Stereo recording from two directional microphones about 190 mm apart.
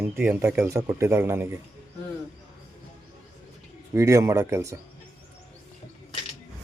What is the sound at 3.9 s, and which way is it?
Speech, 15° right (ahead or behind).